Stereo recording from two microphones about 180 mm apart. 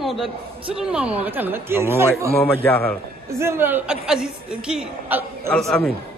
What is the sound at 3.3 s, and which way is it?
A woman's voice, 15° right (ahead or behind).